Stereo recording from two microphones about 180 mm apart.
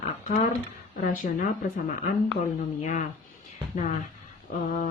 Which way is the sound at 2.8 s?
45° left (ahead or behind).